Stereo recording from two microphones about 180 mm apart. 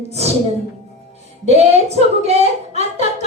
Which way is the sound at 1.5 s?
35° right (ahead or behind).